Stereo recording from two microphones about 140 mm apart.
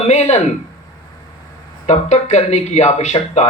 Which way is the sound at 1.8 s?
55° left (ahead or behind).